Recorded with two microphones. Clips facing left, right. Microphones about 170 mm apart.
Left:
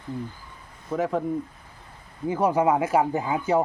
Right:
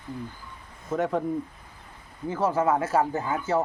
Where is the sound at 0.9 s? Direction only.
Centre (ahead or behind).